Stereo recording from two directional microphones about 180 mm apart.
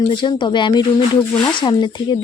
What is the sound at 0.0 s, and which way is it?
Speech, 25° left (ahead or behind).